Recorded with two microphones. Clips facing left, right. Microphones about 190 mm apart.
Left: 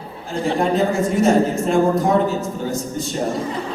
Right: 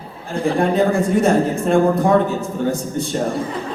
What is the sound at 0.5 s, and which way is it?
A man's voice, 55° right (ahead or behind).